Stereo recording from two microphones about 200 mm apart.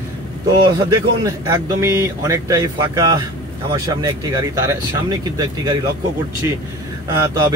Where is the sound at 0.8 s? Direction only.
20° right (ahead or behind).